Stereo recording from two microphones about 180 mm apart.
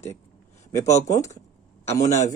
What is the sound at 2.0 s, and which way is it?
Speech, 40° left (ahead or behind).